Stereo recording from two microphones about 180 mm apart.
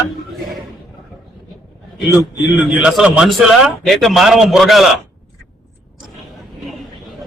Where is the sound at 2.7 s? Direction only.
5° right (ahead or behind).